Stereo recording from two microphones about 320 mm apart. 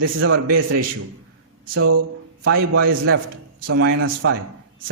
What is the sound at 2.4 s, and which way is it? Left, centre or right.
Speech, right.